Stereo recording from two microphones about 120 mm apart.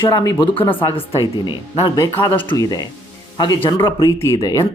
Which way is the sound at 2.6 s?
30° left (ahead or behind).